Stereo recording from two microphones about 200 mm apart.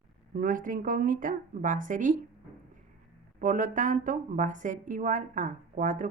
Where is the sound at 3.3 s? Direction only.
40° right (ahead or behind).